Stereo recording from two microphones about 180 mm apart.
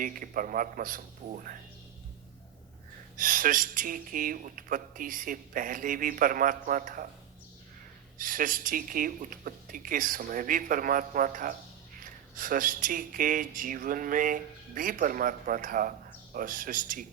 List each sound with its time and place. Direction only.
0.0 s speech: 50° right (ahead or behind)
3.2 s speech: 50° right (ahead or behind)
8.2 s speech: 50° right (ahead or behind)